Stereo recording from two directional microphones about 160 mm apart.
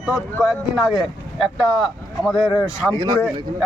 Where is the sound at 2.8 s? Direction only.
10° left (ahead or behind).